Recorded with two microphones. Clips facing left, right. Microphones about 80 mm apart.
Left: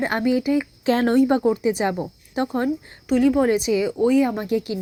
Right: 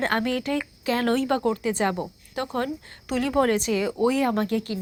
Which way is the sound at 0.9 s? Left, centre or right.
Left.